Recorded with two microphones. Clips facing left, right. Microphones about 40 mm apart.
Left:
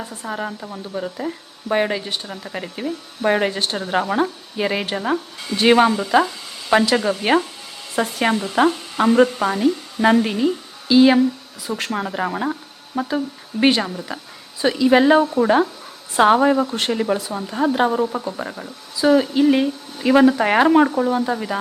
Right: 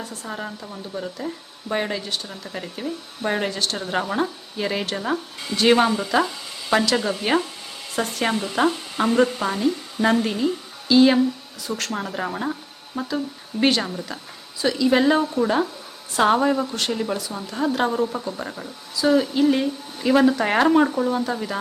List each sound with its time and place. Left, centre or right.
0.0 s a woman's voice: left
6.0 s frying: centre
7.9 s speech: centre
14.6 s a woman's voice: left